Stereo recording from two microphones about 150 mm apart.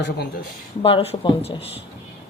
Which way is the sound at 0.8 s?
35° left (ahead or behind).